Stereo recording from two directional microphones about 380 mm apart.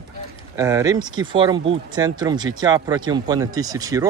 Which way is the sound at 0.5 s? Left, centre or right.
Centre.